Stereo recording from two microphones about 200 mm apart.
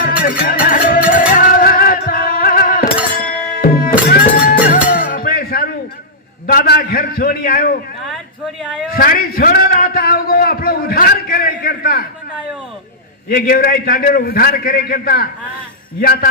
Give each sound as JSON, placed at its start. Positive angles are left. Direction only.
{"t": 0.0, "sound": "music", "side_deg": 45}
{"t": 6.5, "sound": "a man's voice", "side_deg": 50}
{"t": 9.0, "sound": "a man's voice", "side_deg": 45}
{"t": 13.2, "sound": "a man's voice", "side_deg": 50}